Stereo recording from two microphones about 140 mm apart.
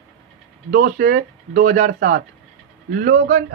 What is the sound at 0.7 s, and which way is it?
Speech, 80° right.